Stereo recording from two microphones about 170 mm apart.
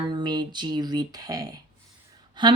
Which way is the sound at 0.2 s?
25° right (ahead or behind).